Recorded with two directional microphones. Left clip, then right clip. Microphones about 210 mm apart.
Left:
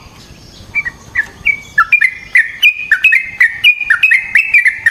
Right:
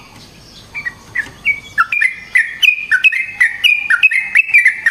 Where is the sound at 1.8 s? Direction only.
15° left (ahead or behind).